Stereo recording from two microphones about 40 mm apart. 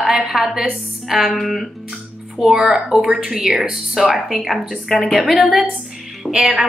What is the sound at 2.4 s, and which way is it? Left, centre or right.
A woman's voice, centre.